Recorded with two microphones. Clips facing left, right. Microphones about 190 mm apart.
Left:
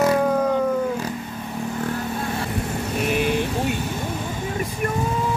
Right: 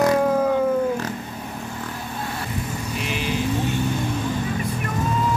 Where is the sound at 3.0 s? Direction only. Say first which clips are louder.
Left 7 dB; 55° left (ahead or behind).